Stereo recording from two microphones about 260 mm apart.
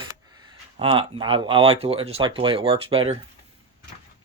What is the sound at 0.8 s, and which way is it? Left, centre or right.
Speech, right.